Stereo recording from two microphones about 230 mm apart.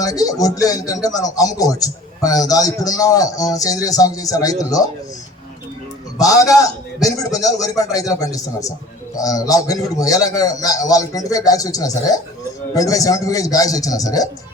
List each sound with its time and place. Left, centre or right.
0.0 s speech: centre
6.1 s speech: centre